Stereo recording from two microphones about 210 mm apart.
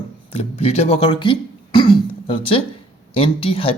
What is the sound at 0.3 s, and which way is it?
Speech, 30° left (ahead or behind).